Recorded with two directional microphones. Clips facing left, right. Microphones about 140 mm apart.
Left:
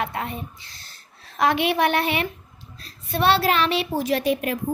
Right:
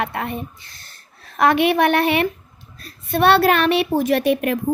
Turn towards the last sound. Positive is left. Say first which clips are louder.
# right 4 dB
turn(degrees=-60)  # may be behind; listen again after turning